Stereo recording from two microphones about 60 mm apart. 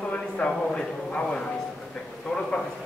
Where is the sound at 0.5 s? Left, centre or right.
Centre.